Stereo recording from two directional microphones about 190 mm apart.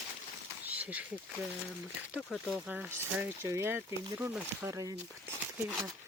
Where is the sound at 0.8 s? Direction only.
10° right (ahead or behind).